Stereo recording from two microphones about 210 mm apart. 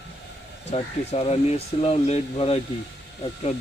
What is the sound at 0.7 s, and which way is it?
Speech, 30° left (ahead or behind).